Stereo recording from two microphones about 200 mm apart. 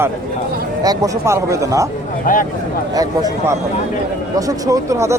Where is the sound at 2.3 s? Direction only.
40° left (ahead or behind).